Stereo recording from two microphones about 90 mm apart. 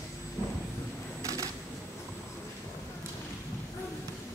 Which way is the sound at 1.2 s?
40° right (ahead or behind).